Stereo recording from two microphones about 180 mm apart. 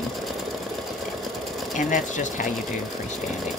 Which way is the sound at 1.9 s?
45° left (ahead or behind).